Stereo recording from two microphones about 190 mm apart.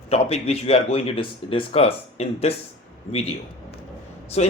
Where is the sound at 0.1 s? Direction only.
35° left (ahead or behind).